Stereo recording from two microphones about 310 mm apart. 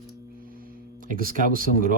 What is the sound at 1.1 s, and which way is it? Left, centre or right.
Speech, right.